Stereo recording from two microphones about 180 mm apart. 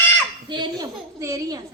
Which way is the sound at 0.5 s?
25° right (ahead or behind).